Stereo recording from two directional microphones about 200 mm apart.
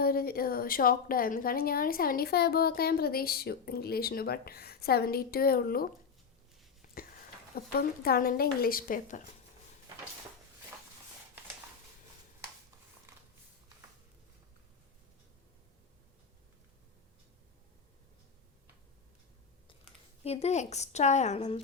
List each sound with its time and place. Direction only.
0.0 s a woman's voice: 50° left (ahead or behind)
6.8 s a sound: 45° left (ahead or behind)
7.5 s a woman's voice: 50° left (ahead or behind)
20.2 s a woman's voice: 30° left (ahead or behind)